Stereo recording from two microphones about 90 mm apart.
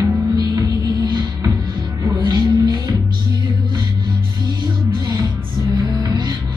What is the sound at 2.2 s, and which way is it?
Music, 50° right (ahead or behind).